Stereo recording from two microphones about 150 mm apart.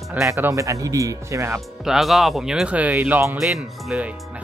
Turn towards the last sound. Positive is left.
turn(degrees=-5)  # may be behind; listen again after turning